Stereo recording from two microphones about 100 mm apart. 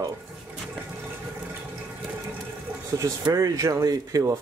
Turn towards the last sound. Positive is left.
turn(degrees=-35)  # may be behind; listen again after turning